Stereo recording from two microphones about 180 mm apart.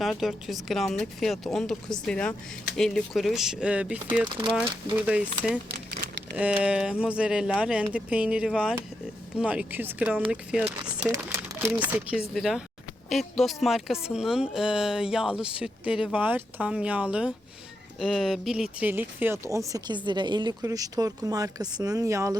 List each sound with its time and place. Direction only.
0.0 s speech: centre (ahead or behind); by 22.4 s 15° right (ahead or behind)